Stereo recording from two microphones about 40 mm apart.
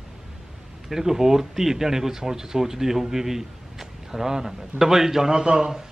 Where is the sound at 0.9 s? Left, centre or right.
Centre.